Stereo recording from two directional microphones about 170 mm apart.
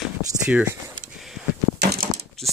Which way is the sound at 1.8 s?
70° right (ahead or behind).